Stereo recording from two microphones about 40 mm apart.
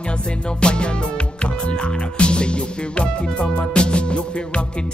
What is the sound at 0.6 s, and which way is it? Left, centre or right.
Music, left.